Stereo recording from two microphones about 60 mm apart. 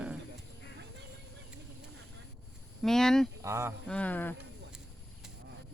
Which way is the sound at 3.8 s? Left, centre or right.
Left.